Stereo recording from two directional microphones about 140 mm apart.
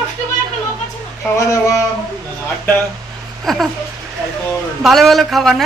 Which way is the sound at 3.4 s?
Centre (ahead or behind).